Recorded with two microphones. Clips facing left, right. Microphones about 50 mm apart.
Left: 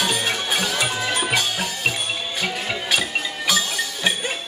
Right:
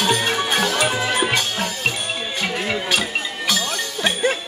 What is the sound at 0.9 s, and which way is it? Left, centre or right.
Music, centre.